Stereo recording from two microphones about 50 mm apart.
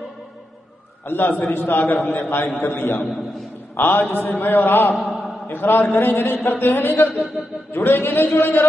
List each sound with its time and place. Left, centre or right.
1.0 s a man's voice: left
4.9 s a sound: centre
5.5 s a man's voice: left
6.6 s a man's voice: left
7.1 s speech: centre
7.7 s a man's voice: left